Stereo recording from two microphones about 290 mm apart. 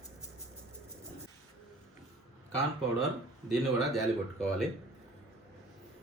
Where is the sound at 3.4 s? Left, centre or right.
Centre.